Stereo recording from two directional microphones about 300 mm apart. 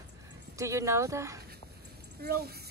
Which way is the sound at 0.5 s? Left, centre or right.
Centre.